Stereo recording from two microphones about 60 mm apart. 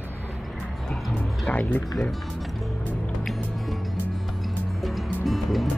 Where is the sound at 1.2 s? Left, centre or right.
Left.